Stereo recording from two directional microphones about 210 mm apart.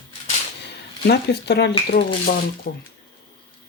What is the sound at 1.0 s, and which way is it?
Speech, 50° left (ahead or behind).